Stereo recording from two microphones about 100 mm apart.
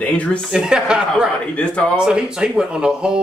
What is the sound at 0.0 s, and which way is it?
Speech, 15° left (ahead or behind).